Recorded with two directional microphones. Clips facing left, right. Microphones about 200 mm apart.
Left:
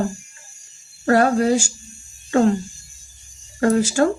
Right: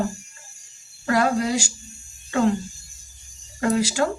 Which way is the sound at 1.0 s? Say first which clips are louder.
Left 5 dB; 45° left (ahead or behind).